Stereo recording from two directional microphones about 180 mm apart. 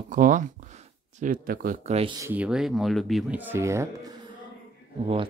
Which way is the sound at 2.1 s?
10° right (ahead or behind).